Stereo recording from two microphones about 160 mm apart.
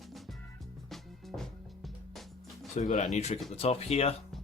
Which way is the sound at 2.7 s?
50° left (ahead or behind).